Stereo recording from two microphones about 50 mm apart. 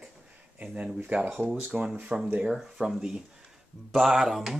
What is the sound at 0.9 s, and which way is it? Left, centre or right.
Speech, right.